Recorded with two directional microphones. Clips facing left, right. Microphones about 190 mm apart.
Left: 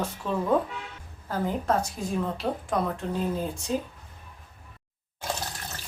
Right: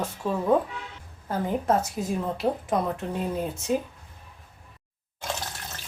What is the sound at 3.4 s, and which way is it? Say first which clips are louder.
Speech: right 1 dB; 20° right (ahead or behind).